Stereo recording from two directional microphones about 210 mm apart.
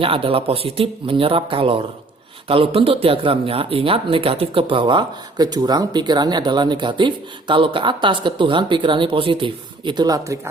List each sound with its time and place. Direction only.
0.0 s speech: 25° right (ahead or behind)